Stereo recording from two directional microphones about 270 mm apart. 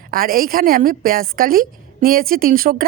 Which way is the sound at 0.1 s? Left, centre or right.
Right.